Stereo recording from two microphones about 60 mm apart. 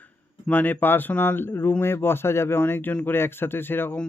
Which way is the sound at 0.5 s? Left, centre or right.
Left.